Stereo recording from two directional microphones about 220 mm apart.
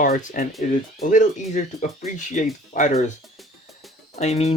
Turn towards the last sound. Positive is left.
turn(degrees=30)  # may be behind; listen again after turning